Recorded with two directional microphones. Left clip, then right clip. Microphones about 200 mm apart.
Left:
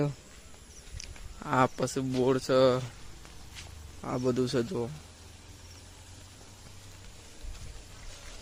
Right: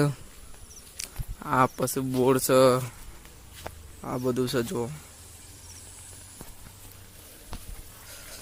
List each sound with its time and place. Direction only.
1.4 s speech: 10° right (ahead or behind)
4.0 s speech: 5° right (ahead or behind)